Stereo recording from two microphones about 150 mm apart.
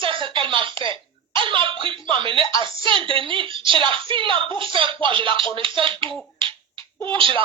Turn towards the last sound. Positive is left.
turn(degrees=-35)  # may be behind; listen again after turning